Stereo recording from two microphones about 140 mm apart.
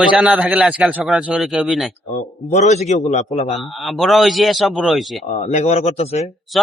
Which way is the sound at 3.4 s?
Centre (ahead or behind).